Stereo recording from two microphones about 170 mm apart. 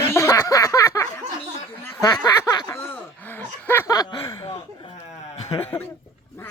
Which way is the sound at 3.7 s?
15° left (ahead or behind).